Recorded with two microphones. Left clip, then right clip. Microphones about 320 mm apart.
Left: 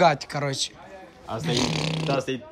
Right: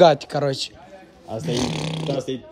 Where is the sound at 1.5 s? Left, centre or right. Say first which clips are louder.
Even; centre.